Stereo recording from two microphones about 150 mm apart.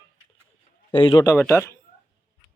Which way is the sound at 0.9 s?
35° left (ahead or behind).